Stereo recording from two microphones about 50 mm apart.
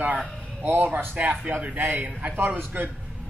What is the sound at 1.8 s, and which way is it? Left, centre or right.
A man's voice, right.